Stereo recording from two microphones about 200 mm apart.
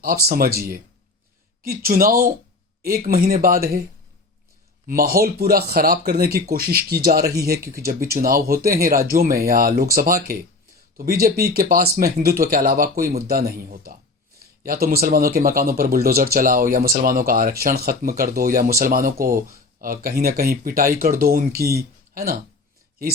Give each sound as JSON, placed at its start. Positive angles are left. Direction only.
{"t": 0.0, "sound": "speech", "side_deg": -50}
{"t": 1.6, "sound": "speech", "side_deg": -45}
{"t": 4.9, "sound": "speech", "side_deg": -45}